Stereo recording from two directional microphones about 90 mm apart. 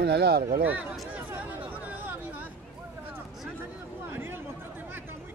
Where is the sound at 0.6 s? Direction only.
20° right (ahead or behind).